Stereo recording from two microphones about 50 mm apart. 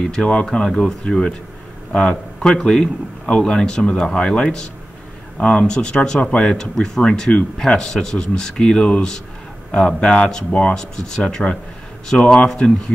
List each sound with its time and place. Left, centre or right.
0.0 s a man's voice: centre